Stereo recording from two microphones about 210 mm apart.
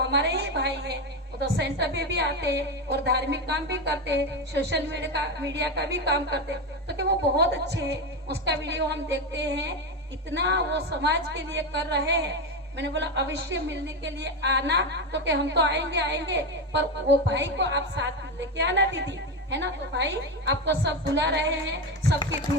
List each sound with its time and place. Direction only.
0.0 s a woman's voice: 55° right (ahead or behind)